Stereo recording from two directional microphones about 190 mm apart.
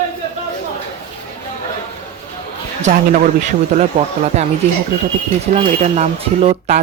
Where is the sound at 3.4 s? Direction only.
35° right (ahead or behind).